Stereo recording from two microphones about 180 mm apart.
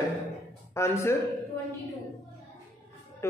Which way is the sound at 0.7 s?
15° left (ahead or behind).